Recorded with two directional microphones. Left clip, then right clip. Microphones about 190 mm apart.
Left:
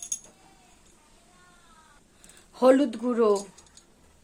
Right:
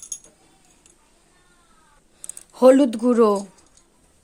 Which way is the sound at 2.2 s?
30° right (ahead or behind).